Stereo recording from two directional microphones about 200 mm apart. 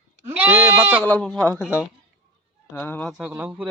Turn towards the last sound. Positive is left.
turn(degrees=-5)  # may be behind; listen again after turning